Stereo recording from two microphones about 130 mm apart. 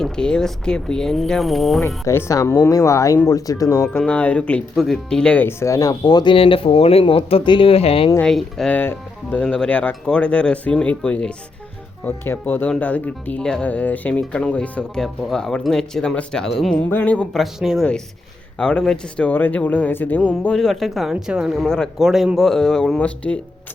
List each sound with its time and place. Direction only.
0.0 s speech: 5° left (ahead or behind)
2.0 s speech: 20° left (ahead or behind)
4.0 s speech: 10° left (ahead or behind); by 8.1 s 45° left (ahead or behind)
8.2 s speech: centre (ahead or behind)
8.7 s speech: 15° left (ahead or behind)
17.4 s speech: centre (ahead or behind)